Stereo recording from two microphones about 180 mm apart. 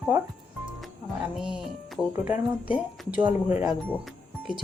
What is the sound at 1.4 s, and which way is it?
Speech, 5° right (ahead or behind).